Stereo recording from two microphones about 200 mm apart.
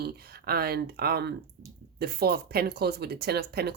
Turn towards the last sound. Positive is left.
turn(degrees=-55)  # may be behind; listen again after turning